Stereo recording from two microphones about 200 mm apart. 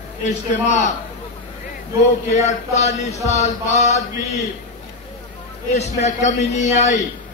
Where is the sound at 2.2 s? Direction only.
35° left (ahead or behind).